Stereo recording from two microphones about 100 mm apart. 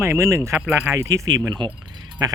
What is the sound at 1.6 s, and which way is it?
Speech, 50° right (ahead or behind).